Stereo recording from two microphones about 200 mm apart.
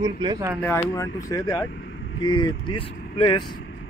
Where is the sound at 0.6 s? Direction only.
10° left (ahead or behind).